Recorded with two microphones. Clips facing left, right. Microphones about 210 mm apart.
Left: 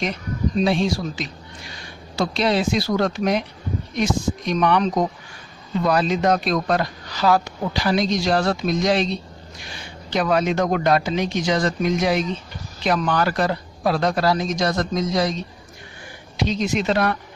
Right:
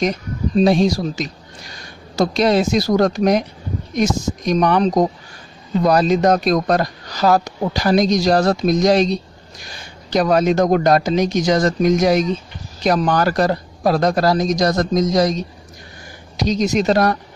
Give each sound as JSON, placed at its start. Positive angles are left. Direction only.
{"t": 0.0, "sound": "speech", "side_deg": -40}